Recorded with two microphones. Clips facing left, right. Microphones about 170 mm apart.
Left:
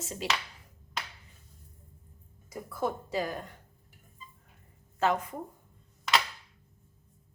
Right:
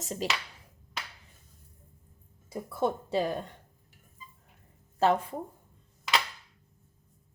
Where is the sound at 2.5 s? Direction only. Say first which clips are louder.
Right 3 dB; 30° right (ahead or behind).